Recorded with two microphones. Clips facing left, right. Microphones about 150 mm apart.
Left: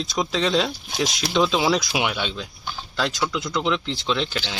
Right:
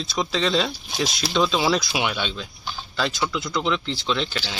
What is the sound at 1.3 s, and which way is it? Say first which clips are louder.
Speech: left 1 dB; 10° left (ahead or behind).